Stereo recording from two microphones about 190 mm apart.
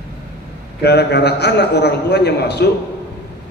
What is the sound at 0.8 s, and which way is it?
Speech, 60° left (ahead or behind).